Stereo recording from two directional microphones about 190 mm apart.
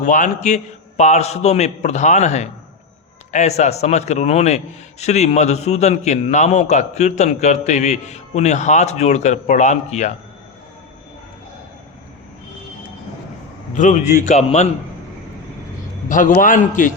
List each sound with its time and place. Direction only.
0.0 s a man's voice: 40° left (ahead or behind)
13.7 s a man's voice: 40° left (ahead or behind)
16.0 s a man's voice: 45° left (ahead or behind)